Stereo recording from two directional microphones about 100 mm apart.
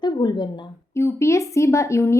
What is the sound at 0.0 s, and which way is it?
Speech, 45° left (ahead or behind).